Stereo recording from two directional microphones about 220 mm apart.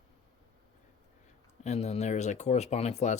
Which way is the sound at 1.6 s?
30° left (ahead or behind).